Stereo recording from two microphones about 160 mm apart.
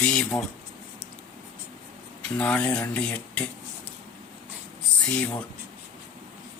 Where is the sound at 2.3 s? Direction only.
10° left (ahead or behind).